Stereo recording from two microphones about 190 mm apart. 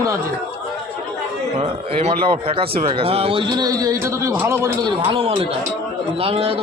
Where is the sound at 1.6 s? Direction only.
35° right (ahead or behind); by 4.9 s 15° right (ahead or behind).